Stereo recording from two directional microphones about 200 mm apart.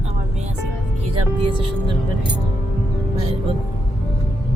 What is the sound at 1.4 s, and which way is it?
Speech, 25° right (ahead or behind).